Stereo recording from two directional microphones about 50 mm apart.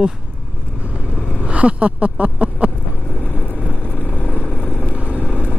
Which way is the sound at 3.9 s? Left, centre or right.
Left.